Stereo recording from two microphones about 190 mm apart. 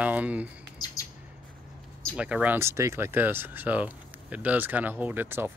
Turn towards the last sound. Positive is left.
turn(degrees=-10)  # may be behind; listen again after turning